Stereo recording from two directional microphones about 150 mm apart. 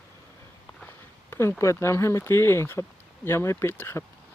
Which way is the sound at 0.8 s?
15° left (ahead or behind).